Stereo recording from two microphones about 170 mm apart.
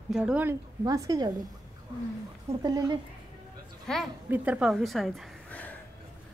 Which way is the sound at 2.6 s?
25° right (ahead or behind).